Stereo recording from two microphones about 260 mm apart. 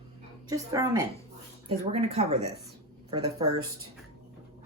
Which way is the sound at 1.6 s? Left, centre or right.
Right.